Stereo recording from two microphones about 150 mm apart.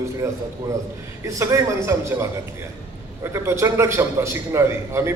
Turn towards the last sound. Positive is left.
turn(degrees=-15)  # may be behind; listen again after turning